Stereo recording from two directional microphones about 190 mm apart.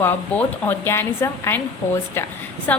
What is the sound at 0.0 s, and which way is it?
A woman's voice, 10° left (ahead or behind).